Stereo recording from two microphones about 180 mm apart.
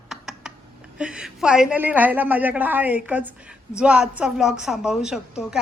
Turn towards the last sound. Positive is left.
turn(degrees=-5)  # may be behind; listen again after turning